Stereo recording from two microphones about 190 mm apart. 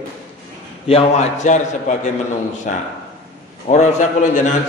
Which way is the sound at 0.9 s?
35° left (ahead or behind).